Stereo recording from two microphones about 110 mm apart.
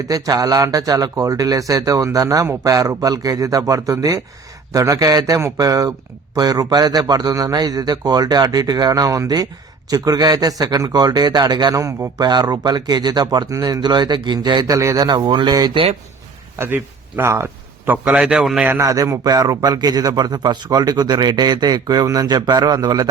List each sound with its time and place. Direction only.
0.0 s a man's voice: 30° right (ahead or behind)
12.2 s a man's voice: 40° right (ahead or behind)
15.7 s speech: 55° right (ahead or behind)
16.6 s a man's voice: 20° right (ahead or behind)
18.7 s a man's voice: 30° right (ahead or behind)